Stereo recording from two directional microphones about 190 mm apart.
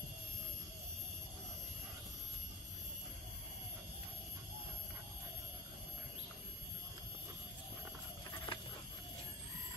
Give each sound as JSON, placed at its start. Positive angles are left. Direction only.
{"t": 8.5, "sound": "chicken", "side_deg": 25}